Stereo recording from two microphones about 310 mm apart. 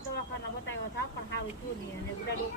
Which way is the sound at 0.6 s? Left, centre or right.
Left.